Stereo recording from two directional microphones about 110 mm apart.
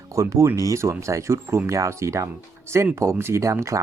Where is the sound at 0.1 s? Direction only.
25° right (ahead or behind).